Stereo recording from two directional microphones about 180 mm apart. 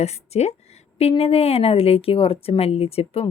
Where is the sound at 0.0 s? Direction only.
35° left (ahead or behind).